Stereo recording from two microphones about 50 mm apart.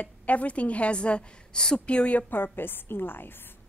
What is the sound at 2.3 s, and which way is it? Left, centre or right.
A woman's voice, left.